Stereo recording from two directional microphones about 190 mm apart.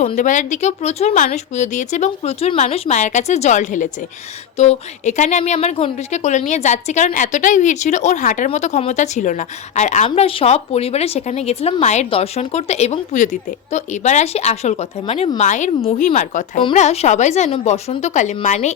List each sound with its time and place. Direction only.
0.0 s a woman's voice: 40° left (ahead or behind)